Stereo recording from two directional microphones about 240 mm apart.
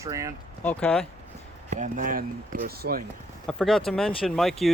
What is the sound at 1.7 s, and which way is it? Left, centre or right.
Speech, right.